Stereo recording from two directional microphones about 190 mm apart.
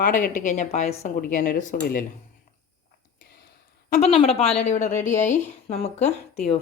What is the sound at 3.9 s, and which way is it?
A woman's voice, 35° left (ahead or behind).